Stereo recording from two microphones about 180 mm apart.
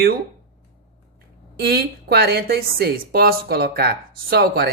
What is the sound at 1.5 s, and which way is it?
A woman's voice, 60° right (ahead or behind).